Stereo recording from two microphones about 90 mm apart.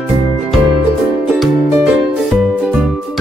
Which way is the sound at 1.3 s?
5° right (ahead or behind).